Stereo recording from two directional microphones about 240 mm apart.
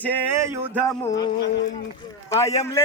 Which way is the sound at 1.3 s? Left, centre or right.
Left.